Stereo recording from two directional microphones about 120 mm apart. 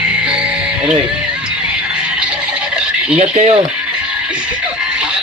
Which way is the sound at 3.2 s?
85° right.